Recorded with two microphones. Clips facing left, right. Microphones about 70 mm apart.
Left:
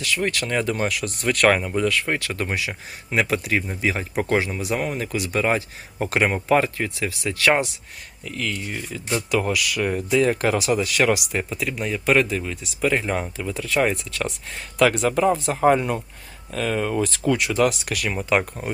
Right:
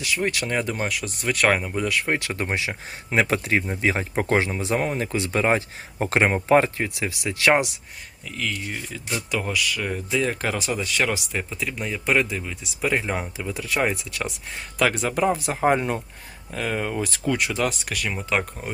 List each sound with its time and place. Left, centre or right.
0.0 s speech: centre
3.1 s speech: right
8.4 s speech: centre
15.1 s speech: centre